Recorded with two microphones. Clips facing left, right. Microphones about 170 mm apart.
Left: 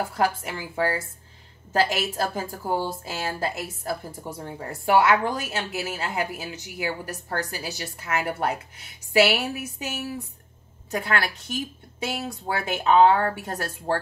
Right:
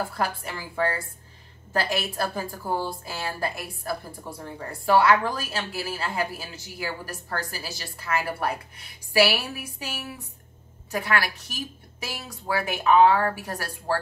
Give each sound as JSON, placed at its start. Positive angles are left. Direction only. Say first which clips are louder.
{"t": 0.1, "sound": "a woman's voice", "louder": "left 4 dB", "side_deg": 20}
{"t": 10.9, "sound": "a woman's voice", "louder": "even", "side_deg": 25}